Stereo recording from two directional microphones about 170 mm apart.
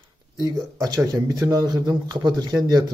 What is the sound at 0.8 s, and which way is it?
Speech, 20° right (ahead or behind).